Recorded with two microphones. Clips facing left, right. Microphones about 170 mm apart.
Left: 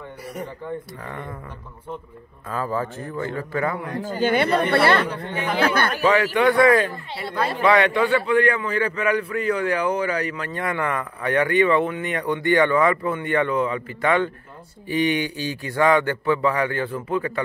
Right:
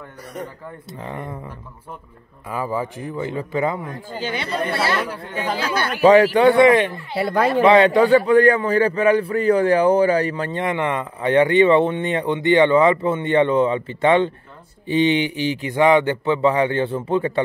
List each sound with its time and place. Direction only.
0.9 s a man's voice: 20° right (ahead or behind)
2.5 s speech: 15° right (ahead or behind)
4.0 s speech: 55° left (ahead or behind)
6.0 s a man's voice: 35° right (ahead or behind)